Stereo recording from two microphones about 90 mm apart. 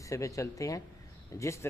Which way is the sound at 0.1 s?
35° left (ahead or behind).